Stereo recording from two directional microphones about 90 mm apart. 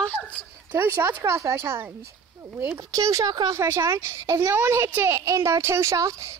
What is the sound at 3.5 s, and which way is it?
A woman's voice, 30° right (ahead or behind).